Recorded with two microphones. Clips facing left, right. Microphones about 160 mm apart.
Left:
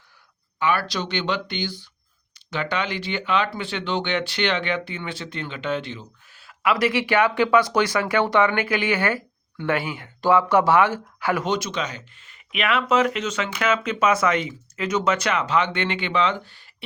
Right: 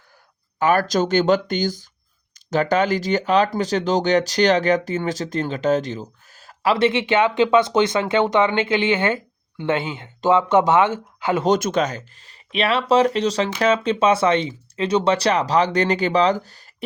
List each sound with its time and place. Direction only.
0.6 s speech: 45° right (ahead or behind); by 11.4 s 20° right (ahead or behind)
11.4 s speech: 45° right (ahead or behind)